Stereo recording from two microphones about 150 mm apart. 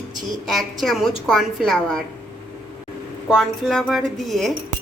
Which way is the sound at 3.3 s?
5° left (ahead or behind).